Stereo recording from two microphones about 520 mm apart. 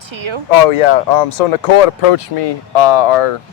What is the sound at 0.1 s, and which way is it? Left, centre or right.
Speech, right.